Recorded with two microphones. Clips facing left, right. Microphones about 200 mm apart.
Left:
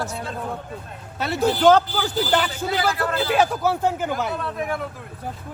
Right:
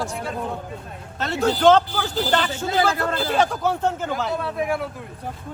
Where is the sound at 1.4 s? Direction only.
5° left (ahead or behind).